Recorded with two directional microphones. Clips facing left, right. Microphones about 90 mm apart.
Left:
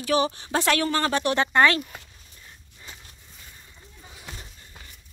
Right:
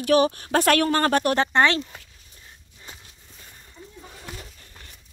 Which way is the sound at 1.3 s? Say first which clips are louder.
Even; 30° right (ahead or behind).